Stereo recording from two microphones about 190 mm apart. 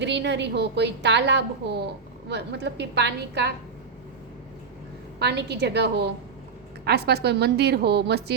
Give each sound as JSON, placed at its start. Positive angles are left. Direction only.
{"t": 0.0, "sound": "a woman's voice", "side_deg": -65}
{"t": 5.2, "sound": "a woman's voice", "side_deg": -65}